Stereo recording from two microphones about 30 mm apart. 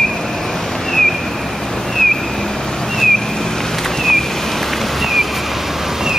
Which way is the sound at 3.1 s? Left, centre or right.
Centre.